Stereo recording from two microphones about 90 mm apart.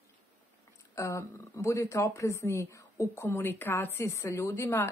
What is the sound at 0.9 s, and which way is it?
Speech, 35° left (ahead or behind).